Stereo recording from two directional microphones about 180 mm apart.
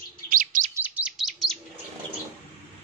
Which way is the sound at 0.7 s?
10° right (ahead or behind).